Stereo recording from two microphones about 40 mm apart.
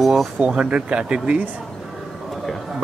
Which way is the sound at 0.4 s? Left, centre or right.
Right.